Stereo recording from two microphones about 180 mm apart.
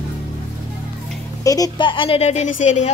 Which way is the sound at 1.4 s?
20° left (ahead or behind).